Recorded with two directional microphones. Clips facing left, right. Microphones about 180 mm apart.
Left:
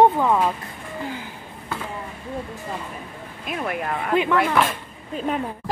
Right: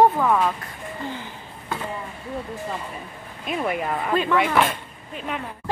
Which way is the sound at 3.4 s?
Centre (ahead or behind).